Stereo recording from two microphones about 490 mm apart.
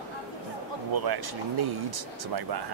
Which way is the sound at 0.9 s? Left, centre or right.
Right.